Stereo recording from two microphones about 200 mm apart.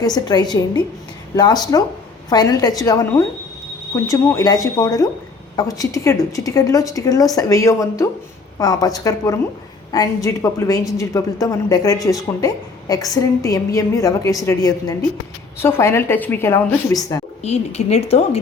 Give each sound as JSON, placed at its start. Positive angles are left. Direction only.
{"t": 0.0, "sound": "a woman's voice", "side_deg": 20}
{"t": 17.4, "sound": "a woman's voice", "side_deg": 35}